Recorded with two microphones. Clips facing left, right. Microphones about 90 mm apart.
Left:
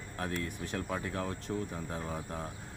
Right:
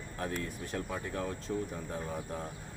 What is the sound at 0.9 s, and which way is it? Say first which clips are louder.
Speech: left 2 dB; 40° left (ahead or behind).